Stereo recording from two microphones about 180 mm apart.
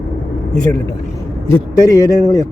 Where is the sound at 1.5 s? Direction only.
20° left (ahead or behind).